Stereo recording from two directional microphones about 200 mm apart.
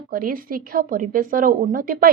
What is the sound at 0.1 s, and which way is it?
A woman's voice, 45° right (ahead or behind).